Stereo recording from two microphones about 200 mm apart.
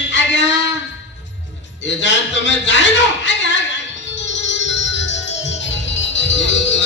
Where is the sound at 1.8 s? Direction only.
65° left (ahead or behind).